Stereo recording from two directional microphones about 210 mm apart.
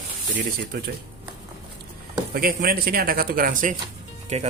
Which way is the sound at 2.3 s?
45° right (ahead or behind).